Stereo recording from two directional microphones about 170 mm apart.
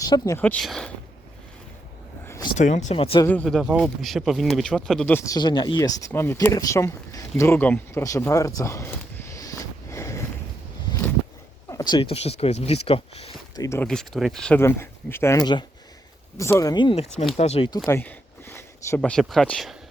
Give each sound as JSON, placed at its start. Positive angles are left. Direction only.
{"t": 0.0, "sound": "speech", "side_deg": 20}
{"t": 2.6, "sound": "speech", "side_deg": 45}
{"t": 3.2, "sound": "speech", "side_deg": 5}
{"t": 10.9, "sound": "a sound", "side_deg": 25}
{"t": 12.1, "sound": "speech", "side_deg": 35}
{"t": 13.6, "sound": "speech", "side_deg": 15}
{"t": 13.8, "sound": "speech", "side_deg": 5}
{"t": 14.6, "sound": "speech", "side_deg": 15}
{"t": 15.4, "sound": "speech", "side_deg": 25}
{"t": 17.8, "sound": "a sound", "side_deg": 15}
{"t": 19.2, "sound": "speech", "side_deg": 0}